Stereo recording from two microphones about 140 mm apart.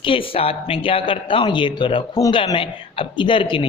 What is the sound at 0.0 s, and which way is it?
Speech, 40° left (ahead or behind).